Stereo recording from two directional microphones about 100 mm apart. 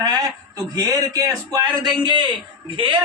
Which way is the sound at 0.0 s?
40° right (ahead or behind).